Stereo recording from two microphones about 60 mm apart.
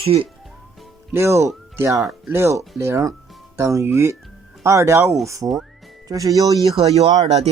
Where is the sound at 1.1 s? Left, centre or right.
Right.